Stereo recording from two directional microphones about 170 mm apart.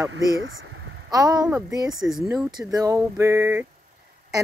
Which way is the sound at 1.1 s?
20° right (ahead or behind).